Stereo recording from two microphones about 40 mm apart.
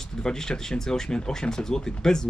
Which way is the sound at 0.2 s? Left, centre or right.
Centre.